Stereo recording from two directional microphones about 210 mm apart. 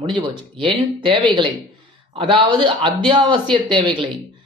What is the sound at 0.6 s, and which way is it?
Speech, 25° right (ahead or behind).